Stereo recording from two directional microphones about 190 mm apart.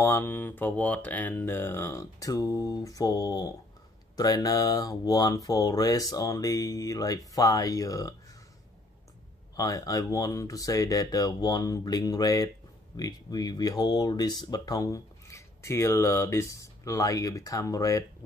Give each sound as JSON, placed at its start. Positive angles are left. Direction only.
{"t": 0.0, "sound": "speech", "side_deg": 15}
{"t": 9.6, "sound": "speech", "side_deg": 20}